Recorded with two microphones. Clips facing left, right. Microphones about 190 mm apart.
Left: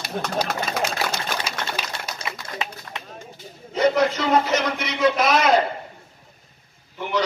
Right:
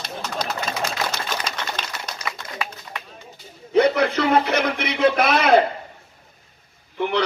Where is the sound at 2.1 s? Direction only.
25° left (ahead or behind).